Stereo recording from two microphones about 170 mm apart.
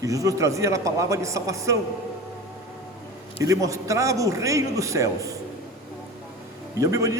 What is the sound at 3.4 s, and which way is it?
A man's voice, 20° right (ahead or behind).